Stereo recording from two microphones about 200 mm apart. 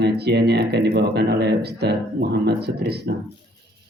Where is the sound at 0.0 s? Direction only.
55° right (ahead or behind).